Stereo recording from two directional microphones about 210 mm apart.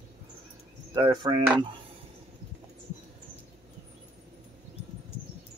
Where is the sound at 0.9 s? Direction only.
20° right (ahead or behind).